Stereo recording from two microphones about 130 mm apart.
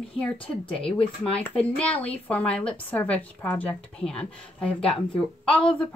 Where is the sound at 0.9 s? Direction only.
45° left (ahead or behind).